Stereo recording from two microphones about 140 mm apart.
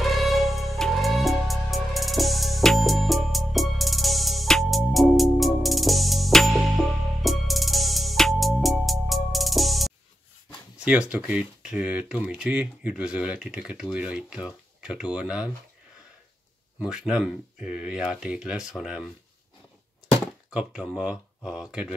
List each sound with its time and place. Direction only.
0.0 s music: centre (ahead or behind)
10.8 s speech: 10° right (ahead or behind)
16.8 s speech: 5° right (ahead or behind)
20.5 s speech: 5° right (ahead or behind)